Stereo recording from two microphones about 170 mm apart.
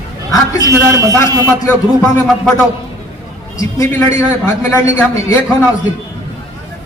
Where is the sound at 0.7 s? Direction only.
20° right (ahead or behind).